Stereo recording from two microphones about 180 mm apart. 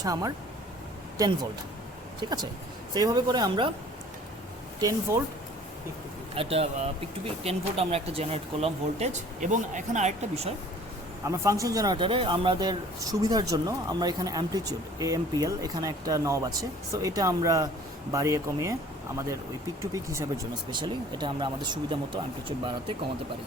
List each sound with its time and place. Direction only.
0.0 s speech: 20° right (ahead or behind)
2.2 s speech: 25° right (ahead or behind)
4.8 s speech: 15° right (ahead or behind)
6.3 s speech: 35° right (ahead or behind)
11.3 s speech: 15° right (ahead or behind)
19.8 s speech: 15° right (ahead or behind)